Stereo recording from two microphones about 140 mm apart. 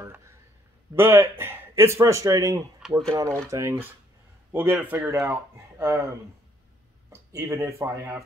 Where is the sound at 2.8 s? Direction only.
5° right (ahead or behind).